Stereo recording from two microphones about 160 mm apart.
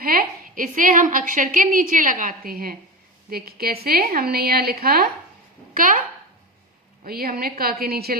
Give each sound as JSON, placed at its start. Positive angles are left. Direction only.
{"t": 0.0, "sound": "a woman's voice", "side_deg": -65}
{"t": 5.7, "sound": "speech", "side_deg": -60}
{"t": 7.0, "sound": "a woman's voice", "side_deg": -70}